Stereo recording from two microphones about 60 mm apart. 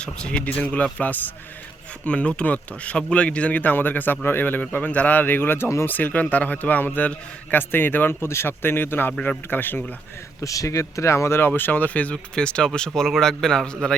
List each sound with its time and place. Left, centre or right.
0.0 s speech: centre; by 9.8 s left
10.4 s a man's voice: left; by 13.7 s centre